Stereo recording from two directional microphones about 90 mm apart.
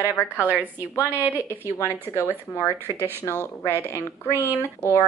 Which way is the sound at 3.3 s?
25° left (ahead or behind).